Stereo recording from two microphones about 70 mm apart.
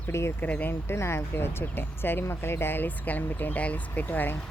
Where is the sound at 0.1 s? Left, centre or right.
Left.